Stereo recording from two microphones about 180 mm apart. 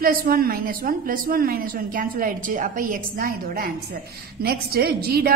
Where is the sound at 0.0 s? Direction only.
55° right (ahead or behind).